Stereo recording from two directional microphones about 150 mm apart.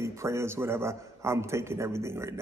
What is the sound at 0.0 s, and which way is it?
A man's voice, 20° right (ahead or behind).